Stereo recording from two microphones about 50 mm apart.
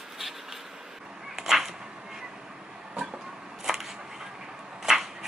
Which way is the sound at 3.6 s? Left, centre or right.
Centre.